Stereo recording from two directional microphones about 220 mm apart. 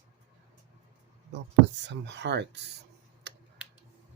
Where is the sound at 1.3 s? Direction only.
55° right (ahead or behind).